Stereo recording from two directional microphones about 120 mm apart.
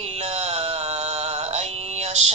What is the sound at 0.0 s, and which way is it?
Synthetic singing, 60° right (ahead or behind).